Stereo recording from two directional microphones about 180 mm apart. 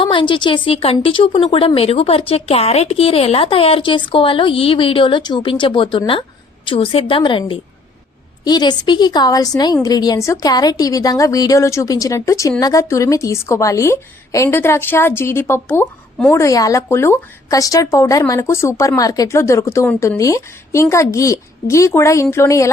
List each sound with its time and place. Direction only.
0.0 s a woman's voice: 25° left (ahead or behind)